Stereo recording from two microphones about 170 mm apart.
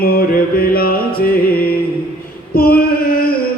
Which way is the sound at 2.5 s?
60° left (ahead or behind).